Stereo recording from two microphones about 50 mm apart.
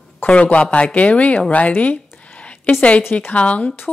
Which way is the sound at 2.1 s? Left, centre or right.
Left.